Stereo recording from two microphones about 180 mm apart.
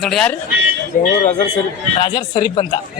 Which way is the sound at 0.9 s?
50° left (ahead or behind).